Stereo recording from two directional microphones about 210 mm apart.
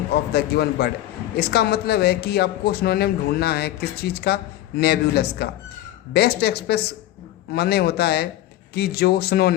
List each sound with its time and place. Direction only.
0.1 s a man's voice: 50° left (ahead or behind)